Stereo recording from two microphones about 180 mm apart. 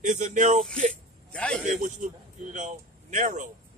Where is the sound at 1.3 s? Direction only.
5° left (ahead or behind).